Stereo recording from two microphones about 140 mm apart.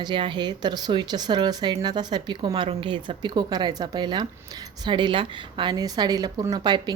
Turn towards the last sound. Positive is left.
turn(degrees=-30)  # may be behind; listen again after turning